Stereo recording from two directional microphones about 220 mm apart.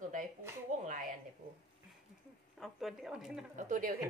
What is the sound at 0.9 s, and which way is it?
Speech, 35° right (ahead or behind).